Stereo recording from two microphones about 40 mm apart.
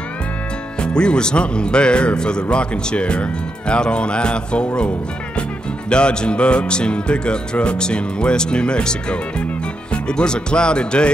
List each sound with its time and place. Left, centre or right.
0.7 s speech: left
5.9 s speech: left